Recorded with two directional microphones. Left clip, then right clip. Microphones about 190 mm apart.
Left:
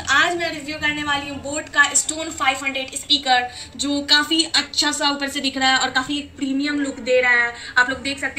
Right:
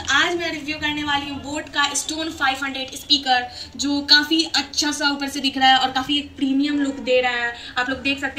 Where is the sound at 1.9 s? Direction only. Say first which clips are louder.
Left 1 dB; centre (ahead or behind).